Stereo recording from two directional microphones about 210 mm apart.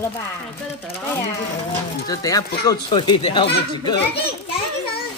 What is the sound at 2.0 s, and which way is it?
Speech, 15° left (ahead or behind).